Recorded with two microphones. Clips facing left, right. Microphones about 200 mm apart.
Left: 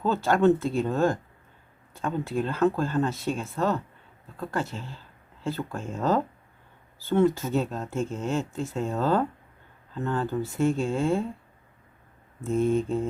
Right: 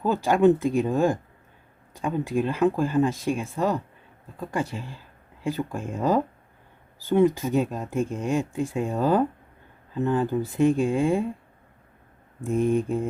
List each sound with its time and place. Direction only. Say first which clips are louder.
0.0 s speech: right 2 dB; 15° right (ahead or behind)
12.4 s speech: right 1 dB; 15° right (ahead or behind)